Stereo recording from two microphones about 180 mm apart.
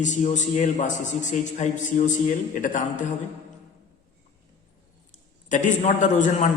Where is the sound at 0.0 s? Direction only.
40° left (ahead or behind).